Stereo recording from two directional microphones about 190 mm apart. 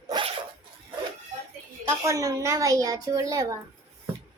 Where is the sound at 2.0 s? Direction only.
15° right (ahead or behind).